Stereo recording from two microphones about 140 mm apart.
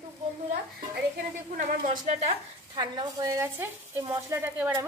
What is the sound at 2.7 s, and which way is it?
Speech, 35° right (ahead or behind).